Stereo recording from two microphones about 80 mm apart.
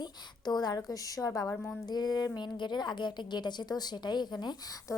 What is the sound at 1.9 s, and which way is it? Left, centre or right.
Speech, left.